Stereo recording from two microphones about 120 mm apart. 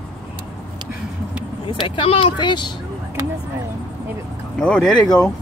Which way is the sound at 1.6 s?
45° left (ahead or behind).